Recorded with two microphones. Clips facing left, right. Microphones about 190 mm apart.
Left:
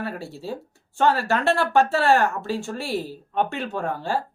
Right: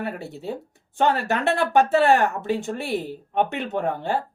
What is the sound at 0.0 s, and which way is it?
A woman's voice, 20° right (ahead or behind).